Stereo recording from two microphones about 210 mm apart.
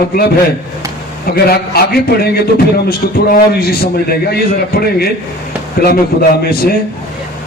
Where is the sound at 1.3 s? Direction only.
45° left (ahead or behind).